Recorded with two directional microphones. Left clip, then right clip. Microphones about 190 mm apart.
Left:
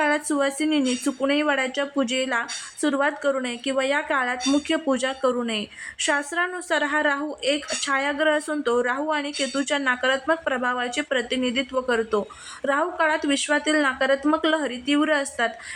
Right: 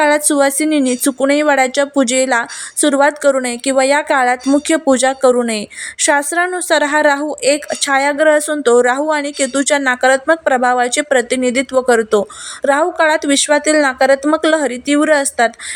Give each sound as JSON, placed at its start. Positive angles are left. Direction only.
{"t": 0.0, "sound": "speech", "side_deg": -35}